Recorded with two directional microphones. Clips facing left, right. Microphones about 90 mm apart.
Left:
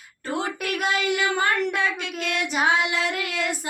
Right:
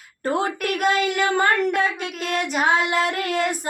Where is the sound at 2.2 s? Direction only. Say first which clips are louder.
Right 3 dB; 40° right (ahead or behind).